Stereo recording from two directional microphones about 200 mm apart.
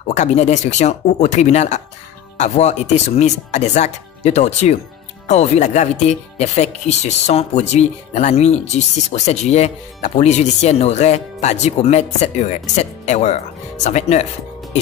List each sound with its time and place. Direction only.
0.0 s speech: 35° left (ahead or behind)